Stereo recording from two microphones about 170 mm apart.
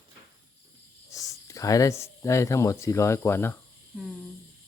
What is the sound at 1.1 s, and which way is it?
Speech, 20° left (ahead or behind).